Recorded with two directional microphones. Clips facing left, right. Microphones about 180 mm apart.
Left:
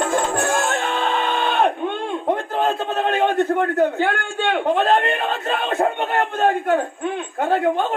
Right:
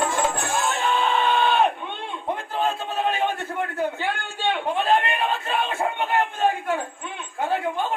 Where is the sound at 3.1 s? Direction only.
60° left (ahead or behind).